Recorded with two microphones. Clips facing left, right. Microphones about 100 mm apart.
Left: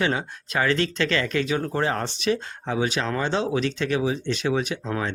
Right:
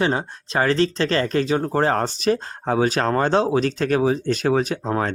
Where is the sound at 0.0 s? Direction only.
35° right (ahead or behind).